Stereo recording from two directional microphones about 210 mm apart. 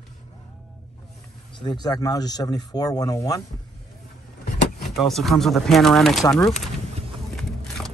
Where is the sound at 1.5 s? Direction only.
20° left (ahead or behind).